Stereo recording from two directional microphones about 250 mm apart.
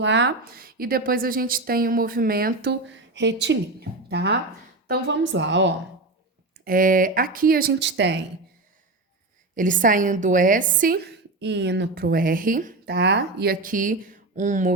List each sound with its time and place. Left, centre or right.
0.0 s a woman's voice: right
6.7 s a woman's voice: right
9.6 s a woman's voice: right